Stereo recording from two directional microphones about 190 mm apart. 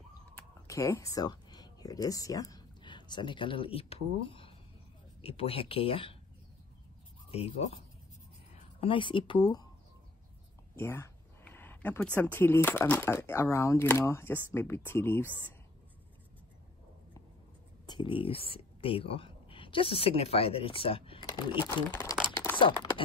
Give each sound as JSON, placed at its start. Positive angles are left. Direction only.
{"t": 0.4, "sound": "speech", "side_deg": 15}
{"t": 7.2, "sound": "speech", "side_deg": 30}
{"t": 8.8, "sound": "speech", "side_deg": 25}
{"t": 10.8, "sound": "speech", "side_deg": 10}
{"t": 17.8, "sound": "speech", "side_deg": 25}